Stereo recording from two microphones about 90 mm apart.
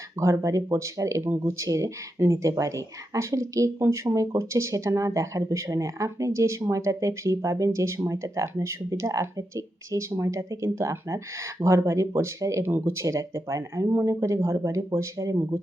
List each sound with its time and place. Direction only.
0.2 s speech: 35° right (ahead or behind)